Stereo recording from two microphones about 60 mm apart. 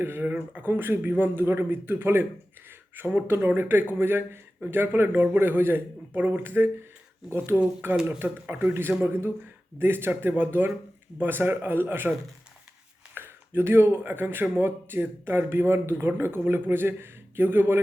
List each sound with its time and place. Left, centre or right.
0.0 s speech: right
2.6 s a sound: right
3.2 s speech: right
13.1 s speech: right